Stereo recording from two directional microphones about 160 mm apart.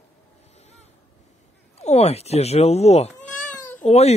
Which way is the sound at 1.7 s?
40° left (ahead or behind).